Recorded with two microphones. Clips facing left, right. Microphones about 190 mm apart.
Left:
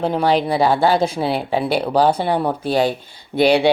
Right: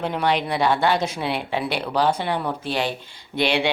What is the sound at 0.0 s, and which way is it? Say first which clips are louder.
Speech: left 5 dB; 35° left (ahead or behind).